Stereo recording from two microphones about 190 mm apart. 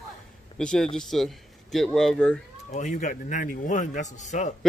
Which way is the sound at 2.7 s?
40° left (ahead or behind).